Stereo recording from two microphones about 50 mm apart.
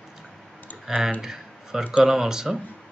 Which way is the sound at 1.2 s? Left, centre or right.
Centre.